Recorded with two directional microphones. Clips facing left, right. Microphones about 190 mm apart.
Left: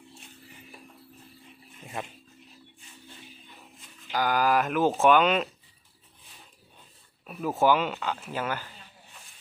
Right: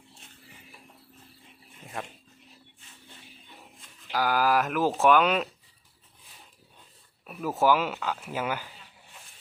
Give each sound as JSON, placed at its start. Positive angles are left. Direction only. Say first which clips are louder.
{"t": 2.0, "sound": "speech", "louder": "left 1 dB", "side_deg": 0}
{"t": 4.1, "sound": "speech", "louder": "even", "side_deg": -5}
{"t": 7.3, "sound": "speech", "louder": "left 1 dB", "side_deg": -5}